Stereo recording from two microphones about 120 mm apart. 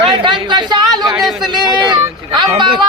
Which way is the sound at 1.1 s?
Centre (ahead or behind).